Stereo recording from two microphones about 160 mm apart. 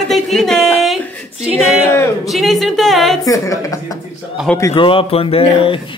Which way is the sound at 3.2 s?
20° left (ahead or behind).